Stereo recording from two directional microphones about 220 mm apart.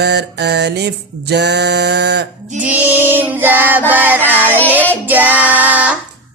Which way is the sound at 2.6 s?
5° right (ahead or behind).